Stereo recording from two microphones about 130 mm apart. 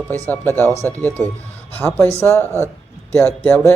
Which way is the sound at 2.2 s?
20° left (ahead or behind).